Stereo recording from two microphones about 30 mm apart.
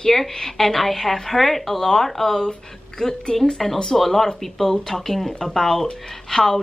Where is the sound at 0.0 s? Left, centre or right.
Centre.